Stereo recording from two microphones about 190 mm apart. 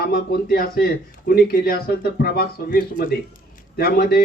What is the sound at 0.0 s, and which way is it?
Speech, 55° left (ahead or behind).